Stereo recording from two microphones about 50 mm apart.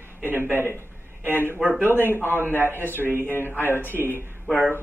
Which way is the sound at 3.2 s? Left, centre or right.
Left.